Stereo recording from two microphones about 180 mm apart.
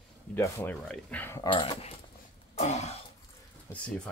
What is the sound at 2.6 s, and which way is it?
Throat clearing, 40° left (ahead or behind).